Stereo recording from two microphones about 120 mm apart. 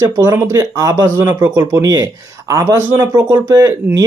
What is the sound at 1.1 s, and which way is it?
Speech, 20° right (ahead or behind).